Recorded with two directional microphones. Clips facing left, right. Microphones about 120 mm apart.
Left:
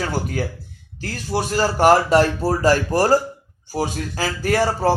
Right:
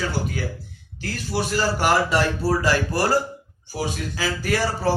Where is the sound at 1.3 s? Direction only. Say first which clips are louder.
Left 3 dB; 40° left (ahead or behind).